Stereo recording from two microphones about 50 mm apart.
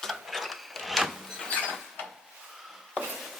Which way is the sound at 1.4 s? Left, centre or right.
Left.